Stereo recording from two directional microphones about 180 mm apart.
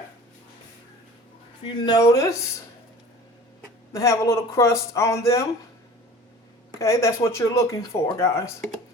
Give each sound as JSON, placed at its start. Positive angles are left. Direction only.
{"t": 1.8, "sound": "speech", "side_deg": 20}
{"t": 3.9, "sound": "speech", "side_deg": 20}
{"t": 6.7, "sound": "speech", "side_deg": 15}